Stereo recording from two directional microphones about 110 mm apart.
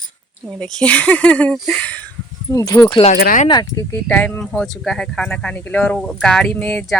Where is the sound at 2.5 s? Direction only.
35° left (ahead or behind).